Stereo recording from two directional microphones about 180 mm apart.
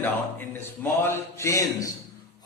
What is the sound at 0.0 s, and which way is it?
A man's voice, 10° left (ahead or behind).